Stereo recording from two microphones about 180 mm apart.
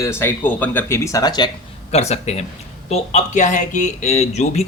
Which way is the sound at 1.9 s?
35° left (ahead or behind).